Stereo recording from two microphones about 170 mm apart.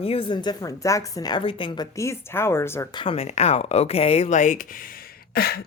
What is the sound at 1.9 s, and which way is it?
Speech, 15° left (ahead or behind).